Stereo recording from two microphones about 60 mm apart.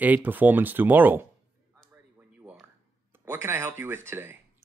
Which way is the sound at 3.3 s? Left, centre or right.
Right.